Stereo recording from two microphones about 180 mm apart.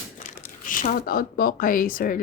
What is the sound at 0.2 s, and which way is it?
Speech, 50° left (ahead or behind).